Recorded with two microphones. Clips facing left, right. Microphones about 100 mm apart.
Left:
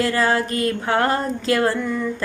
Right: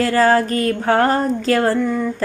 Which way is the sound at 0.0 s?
40° right (ahead or behind).